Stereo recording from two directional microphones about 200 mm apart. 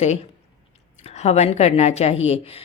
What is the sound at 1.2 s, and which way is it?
A woman's voice, 35° left (ahead or behind).